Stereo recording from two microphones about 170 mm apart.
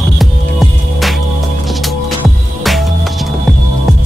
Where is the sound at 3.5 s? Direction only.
Centre (ahead or behind).